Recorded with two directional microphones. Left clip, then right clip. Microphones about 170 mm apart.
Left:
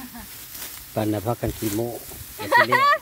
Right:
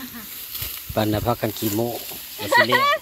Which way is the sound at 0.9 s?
Centre (ahead or behind).